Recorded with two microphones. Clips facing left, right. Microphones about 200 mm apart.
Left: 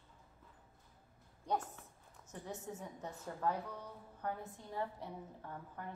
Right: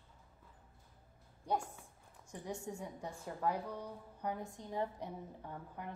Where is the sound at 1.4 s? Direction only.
10° right (ahead or behind).